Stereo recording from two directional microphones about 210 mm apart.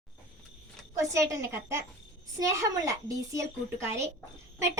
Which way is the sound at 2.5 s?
15° right (ahead or behind).